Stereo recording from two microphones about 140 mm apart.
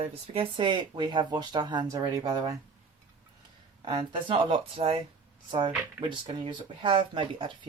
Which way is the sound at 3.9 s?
35° right (ahead or behind).